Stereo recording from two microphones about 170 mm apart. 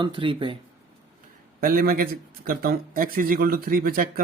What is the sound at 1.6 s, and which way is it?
Speech, 60° right (ahead or behind).